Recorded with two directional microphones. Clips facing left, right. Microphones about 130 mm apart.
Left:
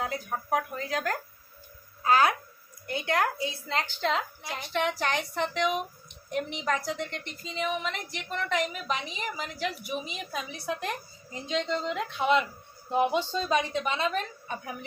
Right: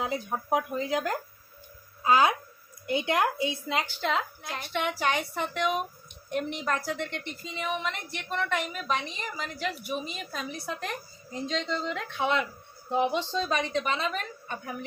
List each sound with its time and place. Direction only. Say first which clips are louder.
0.0 s speech: right 2 dB; 20° right (ahead or behind)
3.8 s a woman's voice: left 1 dB; 5° right (ahead or behind)